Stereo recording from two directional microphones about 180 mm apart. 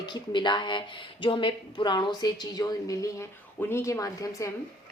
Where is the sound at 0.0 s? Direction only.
25° left (ahead or behind).